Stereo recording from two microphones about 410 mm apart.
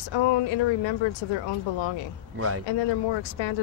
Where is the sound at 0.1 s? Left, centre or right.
Left.